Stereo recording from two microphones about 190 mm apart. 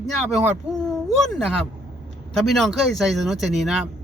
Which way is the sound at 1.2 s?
Centre (ahead or behind).